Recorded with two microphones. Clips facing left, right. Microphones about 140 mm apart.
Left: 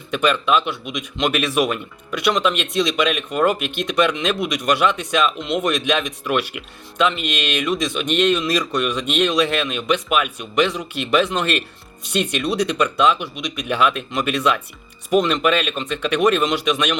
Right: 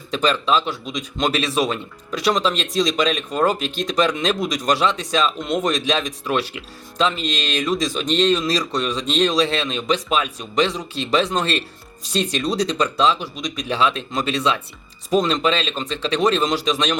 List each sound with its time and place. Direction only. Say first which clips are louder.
0.1 s speech: left 1 dB; 30° right (ahead or behind)